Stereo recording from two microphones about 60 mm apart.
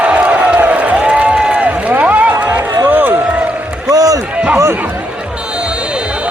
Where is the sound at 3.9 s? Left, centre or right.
Right.